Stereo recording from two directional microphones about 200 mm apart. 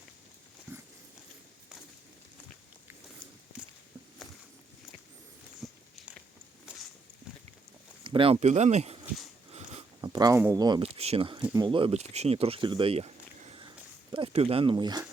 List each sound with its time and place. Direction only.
5.6 s a sound: centre (ahead or behind)
8.0 s speech: 25° right (ahead or behind)
9.5 s wheeze: 30° right (ahead or behind)
10.0 s speech: 20° right (ahead or behind)